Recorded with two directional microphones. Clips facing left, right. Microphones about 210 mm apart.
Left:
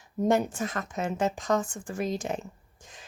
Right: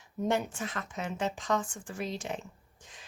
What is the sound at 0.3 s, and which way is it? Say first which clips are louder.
A woman's voice: left 6 dB; 40° left (ahead or behind).